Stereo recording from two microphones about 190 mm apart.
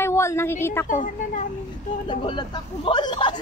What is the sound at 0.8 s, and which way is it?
Speech, 40° left (ahead or behind).